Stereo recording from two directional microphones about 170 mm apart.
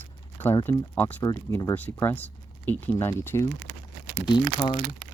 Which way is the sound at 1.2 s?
20° left (ahead or behind).